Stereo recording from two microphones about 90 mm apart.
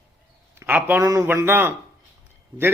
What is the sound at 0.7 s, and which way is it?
Speech, 20° right (ahead or behind).